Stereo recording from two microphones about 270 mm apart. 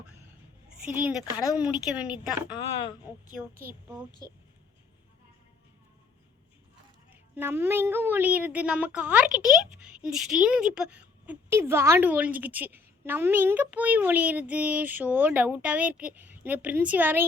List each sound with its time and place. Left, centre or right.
0.0 s a sound: centre
0.9 s a woman's voice: centre
2.1 s a woman's voice: centre
3.7 s a woman's voice: centre
7.1 s a woman's voice: centre